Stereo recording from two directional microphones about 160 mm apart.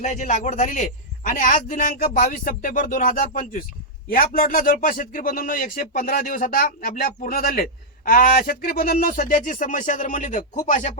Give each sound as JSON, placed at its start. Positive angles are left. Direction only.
{"t": 0.0, "sound": "speech", "side_deg": 50}